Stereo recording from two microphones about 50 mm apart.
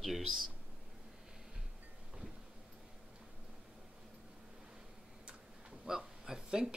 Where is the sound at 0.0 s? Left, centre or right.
Centre.